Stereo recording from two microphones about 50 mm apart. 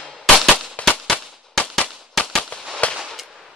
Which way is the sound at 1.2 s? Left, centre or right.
Centre.